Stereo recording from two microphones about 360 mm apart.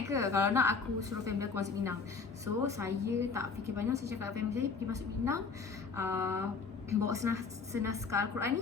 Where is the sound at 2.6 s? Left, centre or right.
Centre.